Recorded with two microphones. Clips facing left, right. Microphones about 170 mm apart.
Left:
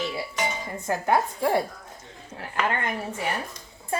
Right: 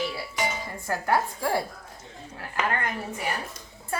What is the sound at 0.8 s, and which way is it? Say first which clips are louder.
Dishes: left 2 dB; 20° left (ahead or behind).